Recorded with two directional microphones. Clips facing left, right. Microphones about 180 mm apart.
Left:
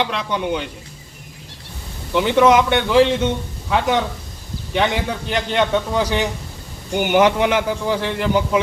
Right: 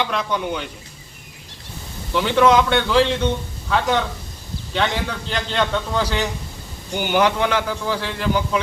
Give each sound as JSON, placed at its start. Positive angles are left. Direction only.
{"t": 0.0, "sound": "a man's voice", "side_deg": 20}
{"t": 2.1, "sound": "a man's voice", "side_deg": 20}